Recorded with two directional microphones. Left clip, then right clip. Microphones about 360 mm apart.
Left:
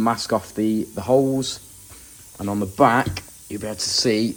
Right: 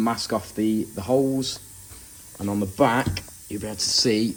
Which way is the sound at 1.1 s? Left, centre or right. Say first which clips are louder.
Left 4 dB; left.